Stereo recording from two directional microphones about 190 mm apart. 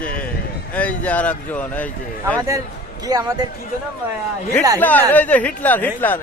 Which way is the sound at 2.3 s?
20° right (ahead or behind).